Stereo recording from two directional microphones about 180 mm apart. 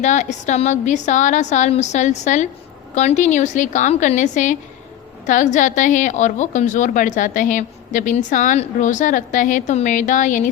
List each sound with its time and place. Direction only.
0.0 s a woman's voice: 40° left (ahead or behind)